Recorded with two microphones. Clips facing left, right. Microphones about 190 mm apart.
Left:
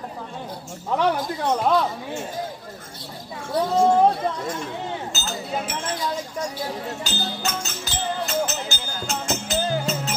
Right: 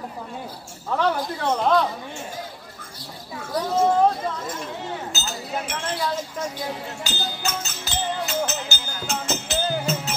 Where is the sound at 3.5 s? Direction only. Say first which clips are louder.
Left 3 dB; 25° left (ahead or behind).